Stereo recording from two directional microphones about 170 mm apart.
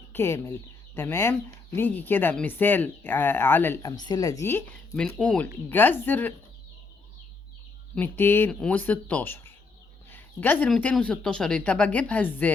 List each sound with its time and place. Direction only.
0.1 s speech: 15° left (ahead or behind)
3.9 s speech: 25° left (ahead or behind)
5.0 s speech: 5° left (ahead or behind)
7.9 s speech: 10° left (ahead or behind)